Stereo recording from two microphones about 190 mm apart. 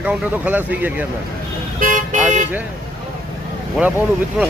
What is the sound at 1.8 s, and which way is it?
Vehicle, 45° right (ahead or behind).